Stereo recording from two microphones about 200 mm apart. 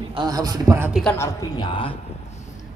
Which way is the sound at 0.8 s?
5° right (ahead or behind).